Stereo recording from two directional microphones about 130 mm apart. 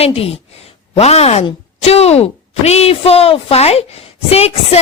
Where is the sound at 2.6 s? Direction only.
55° left (ahead or behind).